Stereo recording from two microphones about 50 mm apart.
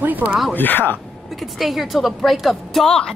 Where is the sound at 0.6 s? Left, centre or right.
Left.